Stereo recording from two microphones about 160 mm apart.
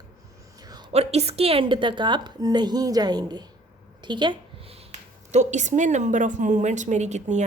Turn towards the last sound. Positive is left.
turn(degrees=-45)  # may be behind; listen again after turning